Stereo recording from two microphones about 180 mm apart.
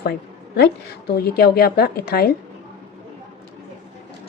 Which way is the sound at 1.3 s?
60° left (ahead or behind).